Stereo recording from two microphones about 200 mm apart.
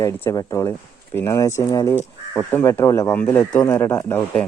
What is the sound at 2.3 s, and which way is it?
Speech, 5° left (ahead or behind).